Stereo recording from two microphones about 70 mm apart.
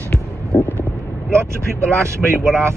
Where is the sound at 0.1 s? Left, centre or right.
Centre.